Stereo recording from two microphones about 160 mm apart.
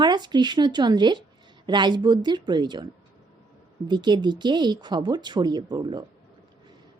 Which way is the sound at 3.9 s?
30° right (ahead or behind).